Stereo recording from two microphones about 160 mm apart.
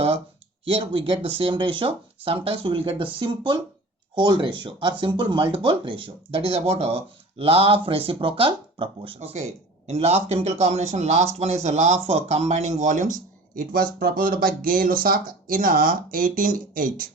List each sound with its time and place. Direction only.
0.6 s speech: 35° right (ahead or behind); by 13.1 s 50° right (ahead or behind)
14.0 s speech: 65° right (ahead or behind)